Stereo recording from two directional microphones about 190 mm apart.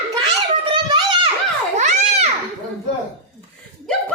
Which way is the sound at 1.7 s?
40° right (ahead or behind).